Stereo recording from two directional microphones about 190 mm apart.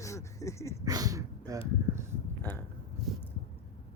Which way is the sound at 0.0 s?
15° left (ahead or behind).